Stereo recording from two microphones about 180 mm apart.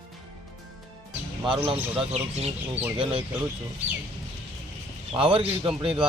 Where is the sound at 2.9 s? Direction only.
30° right (ahead or behind).